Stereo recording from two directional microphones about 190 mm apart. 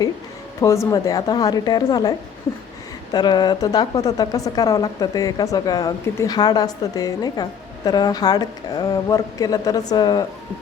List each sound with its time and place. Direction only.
0.6 s a woman's voice: 15° left (ahead or behind)